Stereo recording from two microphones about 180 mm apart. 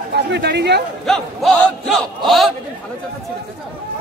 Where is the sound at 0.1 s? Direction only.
70° right (ahead or behind).